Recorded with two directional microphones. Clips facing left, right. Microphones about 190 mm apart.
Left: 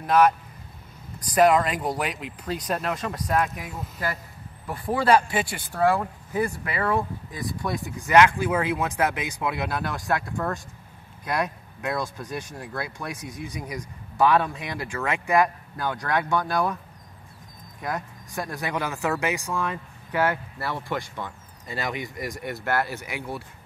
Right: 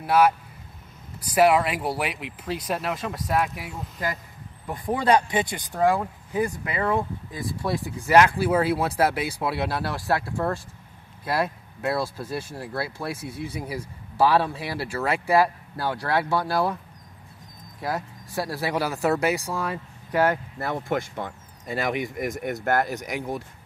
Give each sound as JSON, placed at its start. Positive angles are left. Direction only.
{"t": 0.0, "sound": "speech", "side_deg": -10}
{"t": 17.8, "sound": "speech", "side_deg": -30}